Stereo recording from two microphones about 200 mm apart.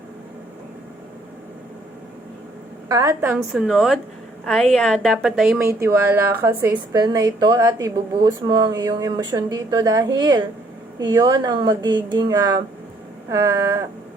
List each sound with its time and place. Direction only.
2.9 s a woman's voice: 15° right (ahead or behind)
5.6 s a woman's voice: 15° right (ahead or behind)
13.3 s a sound: 15° right (ahead or behind)